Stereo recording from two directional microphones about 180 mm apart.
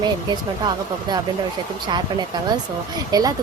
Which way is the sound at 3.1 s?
20° right (ahead or behind).